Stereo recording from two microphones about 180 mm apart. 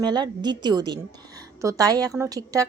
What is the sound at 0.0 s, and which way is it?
A woman's voice, 25° right (ahead or behind).